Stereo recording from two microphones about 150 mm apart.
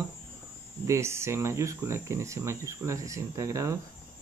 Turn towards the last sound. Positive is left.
turn(degrees=-20)  # may be behind; listen again after turning